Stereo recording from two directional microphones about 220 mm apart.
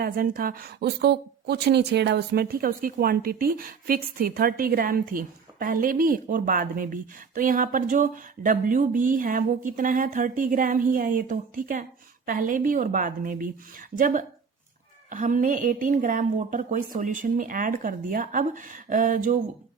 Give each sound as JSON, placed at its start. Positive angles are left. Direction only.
{"t": 0.0, "sound": "a woman's voice", "side_deg": -40}